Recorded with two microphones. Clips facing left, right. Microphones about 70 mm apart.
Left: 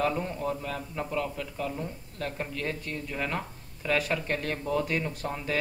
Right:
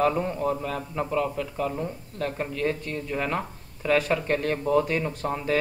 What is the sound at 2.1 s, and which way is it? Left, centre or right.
Speech, centre.